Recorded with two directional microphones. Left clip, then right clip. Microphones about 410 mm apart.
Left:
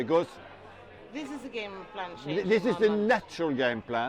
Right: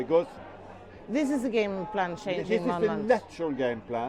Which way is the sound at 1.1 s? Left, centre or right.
Right.